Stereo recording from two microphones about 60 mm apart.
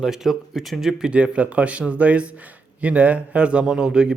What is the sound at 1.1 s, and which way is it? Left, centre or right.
A man's voice, right.